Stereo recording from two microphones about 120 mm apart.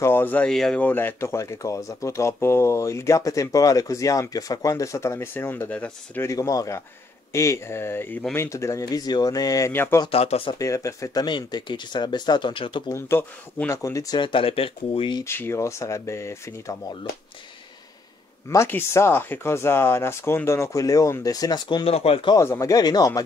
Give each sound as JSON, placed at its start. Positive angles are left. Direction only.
{"t": 0.0, "sound": "speech", "side_deg": 15}
{"t": 6.2, "sound": "speech", "side_deg": 30}
{"t": 10.0, "sound": "speech", "side_deg": 55}
{"t": 10.6, "sound": "speech", "side_deg": 25}
{"t": 11.2, "sound": "speech", "side_deg": 40}
{"t": 13.7, "sound": "speech", "side_deg": 25}
{"t": 14.1, "sound": "speech", "side_deg": 45}
{"t": 15.2, "sound": "speech", "side_deg": 20}
{"t": 18.7, "sound": "speech", "side_deg": 20}
{"t": 21.8, "sound": "speech", "side_deg": 55}
{"t": 22.3, "sound": "speech", "side_deg": 25}